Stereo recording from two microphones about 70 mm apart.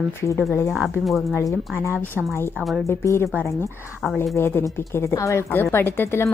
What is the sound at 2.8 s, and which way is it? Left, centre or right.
Speech, left.